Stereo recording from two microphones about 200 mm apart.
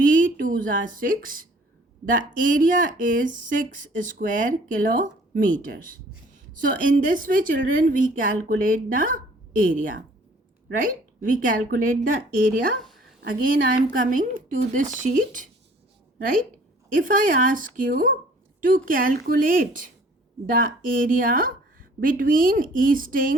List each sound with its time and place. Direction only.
0.0 s a woman's voice: 40° right (ahead or behind)
12.8 s a sound: centre (ahead or behind)
13.9 s a woman's voice: 40° right (ahead or behind)